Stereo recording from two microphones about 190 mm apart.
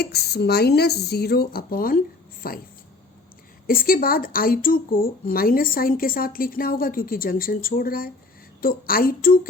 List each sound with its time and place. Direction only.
0.0 s speech: 60° left (ahead or behind)
3.7 s speech: 50° left (ahead or behind)